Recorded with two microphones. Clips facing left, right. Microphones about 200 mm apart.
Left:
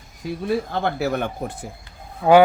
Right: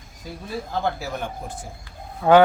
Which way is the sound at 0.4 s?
70° left (ahead or behind).